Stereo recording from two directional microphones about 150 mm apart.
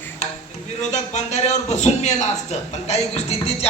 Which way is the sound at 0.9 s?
50° left (ahead or behind).